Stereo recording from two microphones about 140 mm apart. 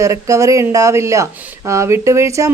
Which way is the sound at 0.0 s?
20° right (ahead or behind).